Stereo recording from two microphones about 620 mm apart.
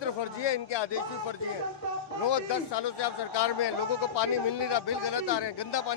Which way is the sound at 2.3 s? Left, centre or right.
Left.